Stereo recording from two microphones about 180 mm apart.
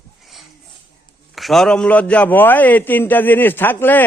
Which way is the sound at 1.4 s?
Centre (ahead or behind).